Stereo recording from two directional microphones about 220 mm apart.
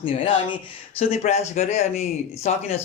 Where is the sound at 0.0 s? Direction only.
25° left (ahead or behind).